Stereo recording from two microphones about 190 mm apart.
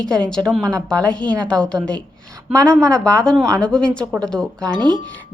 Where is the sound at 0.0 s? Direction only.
5° left (ahead or behind).